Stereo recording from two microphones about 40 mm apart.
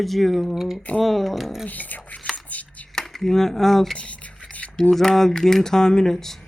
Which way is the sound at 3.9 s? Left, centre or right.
Left.